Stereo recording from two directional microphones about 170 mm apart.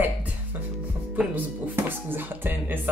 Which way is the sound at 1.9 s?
10° right (ahead or behind).